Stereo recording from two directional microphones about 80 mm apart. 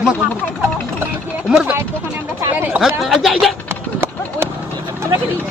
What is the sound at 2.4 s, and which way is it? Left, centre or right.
Speech, right.